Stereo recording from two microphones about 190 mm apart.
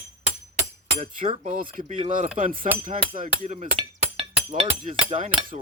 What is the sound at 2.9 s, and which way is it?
Speech, 40° right (ahead or behind).